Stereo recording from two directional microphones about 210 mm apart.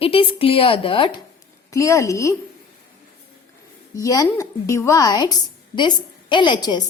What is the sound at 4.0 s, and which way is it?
A woman's voice, 15° left (ahead or behind).